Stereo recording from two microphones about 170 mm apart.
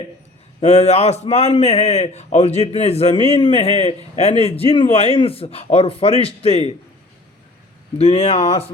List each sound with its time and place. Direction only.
0.6 s a man's voice: 40° left (ahead or behind)
7.9 s a man's voice: 40° left (ahead or behind)